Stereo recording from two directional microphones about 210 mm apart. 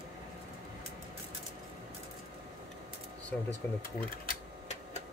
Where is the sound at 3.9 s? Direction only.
40° left (ahead or behind).